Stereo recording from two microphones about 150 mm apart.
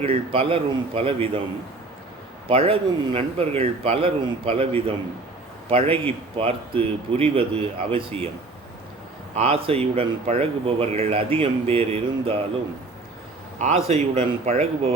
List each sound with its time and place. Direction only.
0.0 s speech: 40° right (ahead or behind)
2.5 s speech: 40° right (ahead or behind)
9.3 s speech: 40° right (ahead or behind)
13.6 s speech: 45° right (ahead or behind)